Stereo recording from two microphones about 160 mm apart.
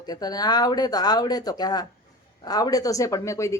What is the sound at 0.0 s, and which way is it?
A man's voice, 25° left (ahead or behind).